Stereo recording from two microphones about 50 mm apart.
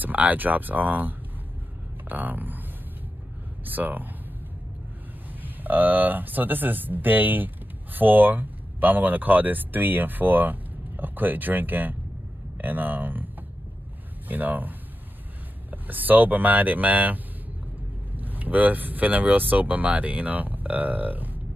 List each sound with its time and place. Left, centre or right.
0.0 s speech: right
3.6 s speech: right
5.3 s speech: right
14.3 s speech: right